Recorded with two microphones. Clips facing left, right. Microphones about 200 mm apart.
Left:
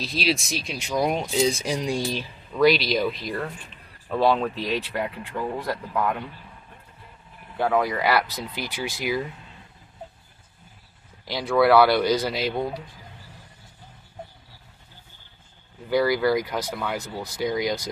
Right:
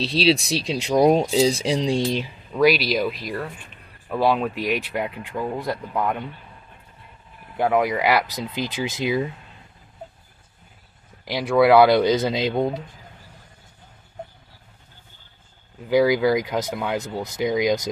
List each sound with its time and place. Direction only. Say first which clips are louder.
0.0 s speech: right 6 dB; 30° right (ahead or behind)
2.6 s speech: right 1 dB; 5° right (ahead or behind); by 6.2 s 20° right (ahead or behind)
7.5 s speech: right 3 dB; 15° right (ahead or behind)
11.2 s speech: right 3 dB; 15° right (ahead or behind)
15.9 s speech: right 3 dB; 15° right (ahead or behind)